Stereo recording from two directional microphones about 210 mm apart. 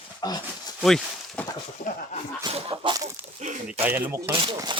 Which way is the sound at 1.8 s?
35° left (ahead or behind).